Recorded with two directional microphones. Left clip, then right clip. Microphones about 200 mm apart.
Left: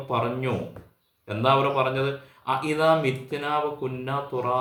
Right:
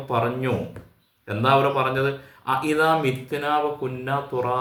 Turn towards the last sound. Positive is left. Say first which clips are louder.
# right 2 dB
turn(degrees=-5)  # may be behind; listen again after turning